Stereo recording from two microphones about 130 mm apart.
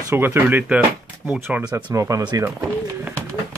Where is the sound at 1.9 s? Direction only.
25° right (ahead or behind).